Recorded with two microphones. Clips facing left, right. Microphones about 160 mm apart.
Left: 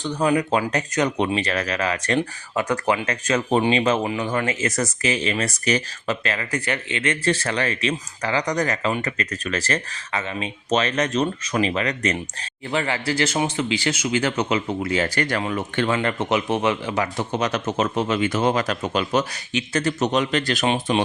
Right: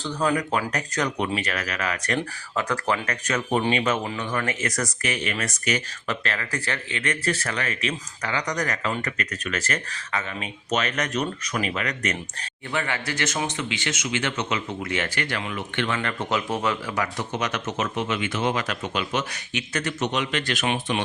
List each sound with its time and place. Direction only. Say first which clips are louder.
0.0 s speech: left 4 dB; 15° left (ahead or behind); by 5.8 s 35° left (ahead or behind)
6.1 s speech: left 4 dB; 20° left (ahead or behind); by 16.0 s 40° left (ahead or behind)
16.0 s speech: left 5 dB; 25° left (ahead or behind)